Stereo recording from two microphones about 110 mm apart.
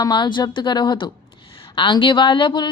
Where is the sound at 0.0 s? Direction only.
40° left (ahead or behind).